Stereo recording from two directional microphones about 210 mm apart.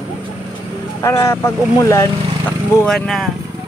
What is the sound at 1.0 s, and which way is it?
A man's voice, 15° left (ahead or behind).